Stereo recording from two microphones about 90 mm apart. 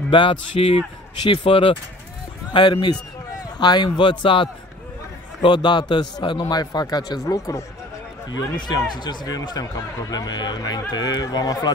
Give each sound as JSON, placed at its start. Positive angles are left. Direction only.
{"t": 0.1, "sound": "speech", "side_deg": 70}
{"t": 2.5, "sound": "a man's voice", "side_deg": 60}
{"t": 8.3, "sound": "a man's voice", "side_deg": 55}